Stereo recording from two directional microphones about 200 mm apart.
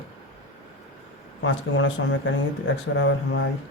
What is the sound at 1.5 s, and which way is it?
Speech, 70° left (ahead or behind).